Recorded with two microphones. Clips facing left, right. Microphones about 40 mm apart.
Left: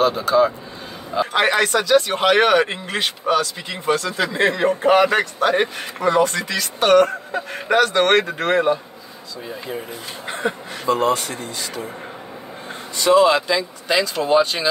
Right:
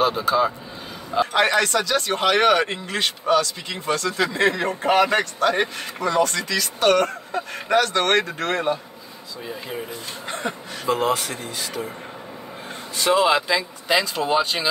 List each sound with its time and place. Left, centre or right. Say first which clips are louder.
0.0 s speech: left 3 dB; centre
1.3 s speech: left 3 dB; centre
10.2 s a sound: left 4 dB; centre
10.9 s speech: left 3 dB; centre
12.9 s speech: left 4 dB; centre